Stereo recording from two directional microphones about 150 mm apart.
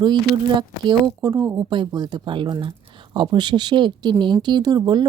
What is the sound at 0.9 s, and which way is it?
Speech, 25° right (ahead or behind).